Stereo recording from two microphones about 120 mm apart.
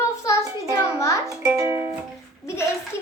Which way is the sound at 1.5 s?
20° right (ahead or behind).